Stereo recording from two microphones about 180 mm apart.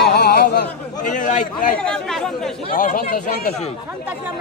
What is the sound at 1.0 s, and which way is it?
Speech, 45° left (ahead or behind).